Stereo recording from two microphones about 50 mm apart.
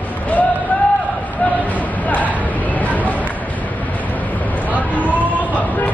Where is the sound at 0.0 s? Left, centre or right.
Left.